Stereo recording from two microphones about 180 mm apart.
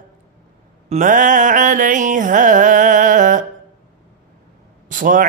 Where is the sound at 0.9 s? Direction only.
45° right (ahead or behind).